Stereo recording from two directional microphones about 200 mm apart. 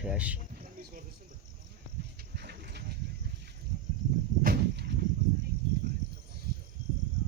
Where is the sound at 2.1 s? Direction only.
55° right (ahead or behind).